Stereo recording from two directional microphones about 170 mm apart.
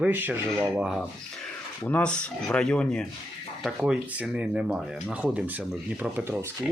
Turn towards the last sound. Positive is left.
turn(degrees=-10)  # may be behind; listen again after turning